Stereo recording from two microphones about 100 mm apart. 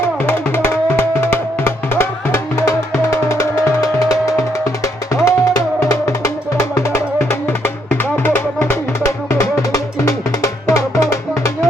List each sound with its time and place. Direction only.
0.2 s music: 20° left (ahead or behind)